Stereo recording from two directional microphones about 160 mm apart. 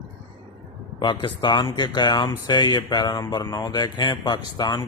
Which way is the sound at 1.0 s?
30° left (ahead or behind).